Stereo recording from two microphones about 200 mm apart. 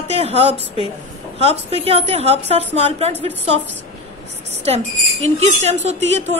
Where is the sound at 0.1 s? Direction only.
30° right (ahead or behind).